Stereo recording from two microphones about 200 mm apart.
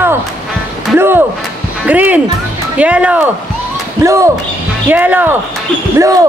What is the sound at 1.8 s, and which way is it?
Speech, 10° right (ahead or behind).